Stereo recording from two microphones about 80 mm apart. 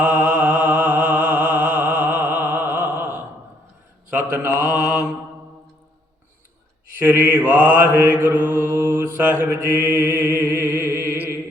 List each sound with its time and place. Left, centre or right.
0.0 s mantra: centre
4.4 s mantra: right
7.0 s mantra: right